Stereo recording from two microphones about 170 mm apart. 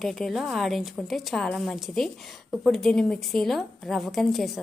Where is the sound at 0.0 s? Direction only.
Centre (ahead or behind).